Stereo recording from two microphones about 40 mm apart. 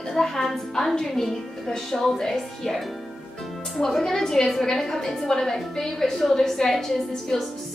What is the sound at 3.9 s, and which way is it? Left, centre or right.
A woman's voice, centre.